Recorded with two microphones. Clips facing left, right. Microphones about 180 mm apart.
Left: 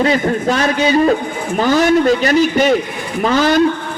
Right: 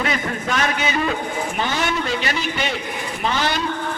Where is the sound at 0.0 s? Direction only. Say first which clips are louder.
Left 9 dB; 35° left (ahead or behind).